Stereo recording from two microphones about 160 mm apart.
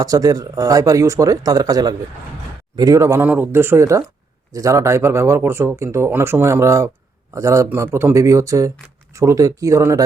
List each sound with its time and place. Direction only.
0.0 s speech: 20° right (ahead or behind)